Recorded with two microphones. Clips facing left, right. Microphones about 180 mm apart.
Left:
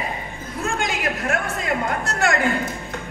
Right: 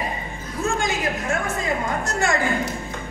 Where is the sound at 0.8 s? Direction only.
60° left (ahead or behind).